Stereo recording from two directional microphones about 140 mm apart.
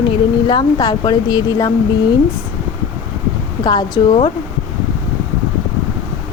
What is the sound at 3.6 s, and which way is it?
Speech, 30° left (ahead or behind).